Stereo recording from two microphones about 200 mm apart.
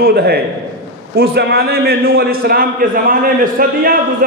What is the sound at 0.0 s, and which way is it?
A man's voice, 50° right (ahead or behind).